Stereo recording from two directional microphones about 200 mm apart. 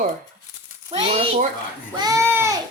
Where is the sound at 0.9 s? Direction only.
30° right (ahead or behind).